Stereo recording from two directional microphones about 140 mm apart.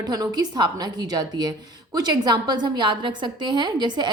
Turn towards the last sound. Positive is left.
turn(degrees=-35)  # may be behind; listen again after turning